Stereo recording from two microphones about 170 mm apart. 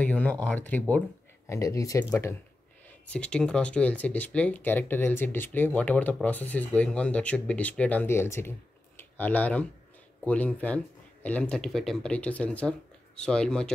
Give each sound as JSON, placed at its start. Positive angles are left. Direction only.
{"t": 0.0, "sound": "speech", "side_deg": 10}